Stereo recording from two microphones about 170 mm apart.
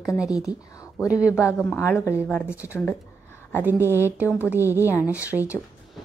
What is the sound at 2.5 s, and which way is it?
A woman's voice, 10° right (ahead or behind).